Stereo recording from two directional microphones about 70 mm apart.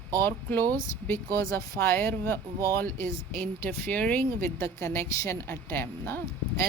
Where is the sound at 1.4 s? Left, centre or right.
Left.